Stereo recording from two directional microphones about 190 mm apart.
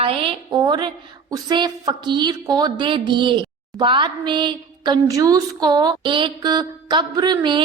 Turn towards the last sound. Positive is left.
turn(degrees=-25)  # may be behind; listen again after turning